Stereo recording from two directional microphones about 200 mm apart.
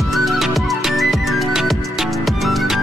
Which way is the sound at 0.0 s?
Centre (ahead or behind).